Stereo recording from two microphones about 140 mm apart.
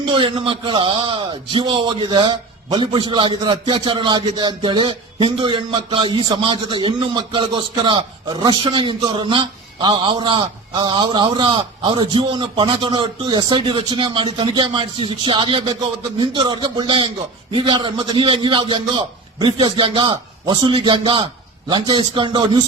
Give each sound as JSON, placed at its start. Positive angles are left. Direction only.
{"t": 0.0, "sound": "a man's voice", "side_deg": -35}